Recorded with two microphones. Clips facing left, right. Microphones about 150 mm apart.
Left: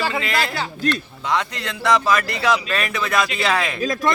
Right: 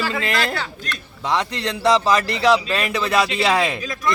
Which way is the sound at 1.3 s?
30° right (ahead or behind).